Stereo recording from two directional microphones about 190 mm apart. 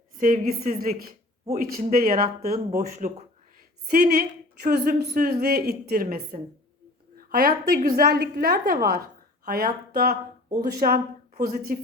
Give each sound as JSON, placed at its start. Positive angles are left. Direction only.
{"t": 0.2, "sound": "a woman's voice", "side_deg": -45}
{"t": 3.8, "sound": "a woman's voice", "side_deg": -55}